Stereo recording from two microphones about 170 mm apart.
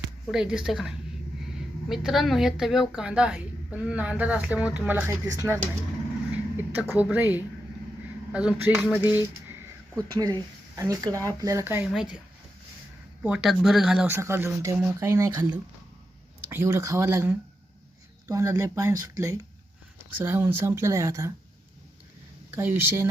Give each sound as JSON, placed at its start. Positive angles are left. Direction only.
{"t": 0.3, "sound": "a woman's voice", "side_deg": -5}
{"t": 10.2, "sound": "a woman's voice", "side_deg": -20}
{"t": 13.2, "sound": "a woman's voice", "side_deg": -5}
{"t": 22.5, "sound": "speech", "side_deg": -15}